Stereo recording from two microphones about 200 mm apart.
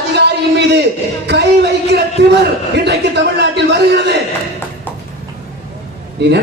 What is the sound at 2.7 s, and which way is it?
A man's voice, 55° right (ahead or behind).